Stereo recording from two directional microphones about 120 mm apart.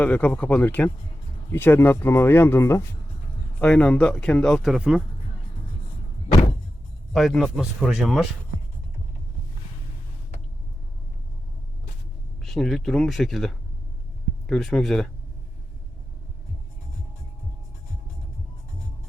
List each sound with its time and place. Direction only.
0.0 s speech: 15° left (ahead or behind)
3.6 s speech: 10° left (ahead or behind); by 5.0 s 5° right (ahead or behind)
7.1 s speech: centre (ahead or behind)
12.4 s speech: 5° left (ahead or behind)